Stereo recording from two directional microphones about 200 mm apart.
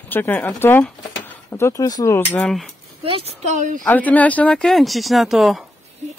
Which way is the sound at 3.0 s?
30° right (ahead or behind).